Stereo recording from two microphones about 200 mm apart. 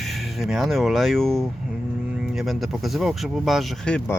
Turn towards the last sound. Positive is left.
turn(degrees=5)  # may be behind; listen again after turning